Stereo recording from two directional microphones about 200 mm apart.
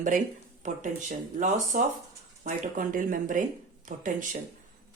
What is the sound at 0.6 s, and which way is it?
Speech, 35° right (ahead or behind).